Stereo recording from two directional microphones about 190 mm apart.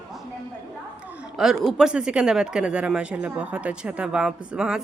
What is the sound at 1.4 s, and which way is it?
Speech, centre (ahead or behind).